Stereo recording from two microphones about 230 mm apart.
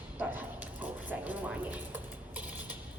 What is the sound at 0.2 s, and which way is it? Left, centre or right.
Bow-wow, centre.